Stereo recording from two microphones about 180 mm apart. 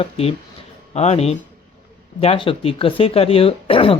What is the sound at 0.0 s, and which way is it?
Speech, 30° left (ahead or behind).